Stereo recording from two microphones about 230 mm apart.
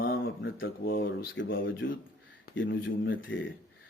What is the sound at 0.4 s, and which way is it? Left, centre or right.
A man's voice, left.